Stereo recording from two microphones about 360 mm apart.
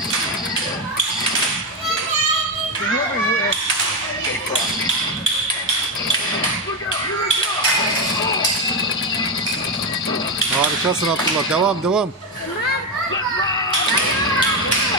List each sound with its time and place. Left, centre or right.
11.5 s speech: centre